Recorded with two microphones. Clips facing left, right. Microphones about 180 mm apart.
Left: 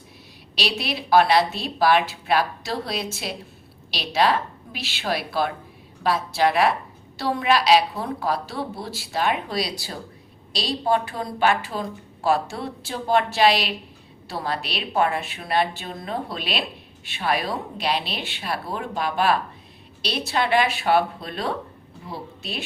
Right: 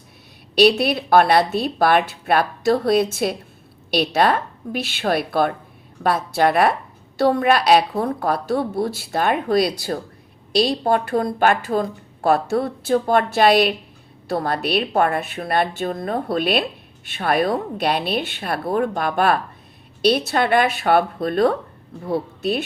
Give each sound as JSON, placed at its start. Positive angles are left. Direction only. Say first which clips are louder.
{"t": 0.5, "sound": "a woman's voice", "louder": "right 12 dB", "side_deg": -50}